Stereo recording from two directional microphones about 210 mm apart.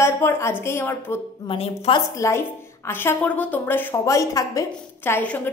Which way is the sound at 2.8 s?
10° left (ahead or behind).